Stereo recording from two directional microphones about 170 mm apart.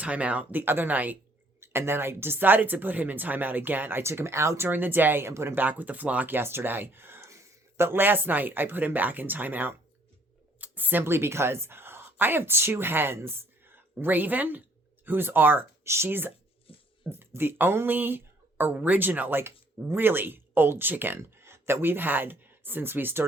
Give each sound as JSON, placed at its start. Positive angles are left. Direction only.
{"t": 0.0, "sound": "speech", "side_deg": -10}
{"t": 16.7, "sound": "a sound", "side_deg": 35}
{"t": 17.1, "sound": "speech", "side_deg": -15}